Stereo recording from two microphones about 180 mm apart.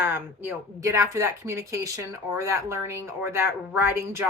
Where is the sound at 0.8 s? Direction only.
15° right (ahead or behind).